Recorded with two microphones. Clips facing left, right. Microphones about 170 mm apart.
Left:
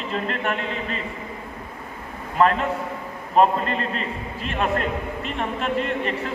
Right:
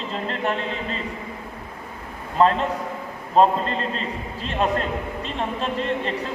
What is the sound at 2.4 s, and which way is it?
A man's voice, 30° right (ahead or behind).